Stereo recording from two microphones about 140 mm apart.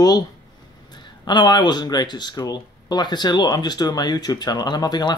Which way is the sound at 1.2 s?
30° left (ahead or behind).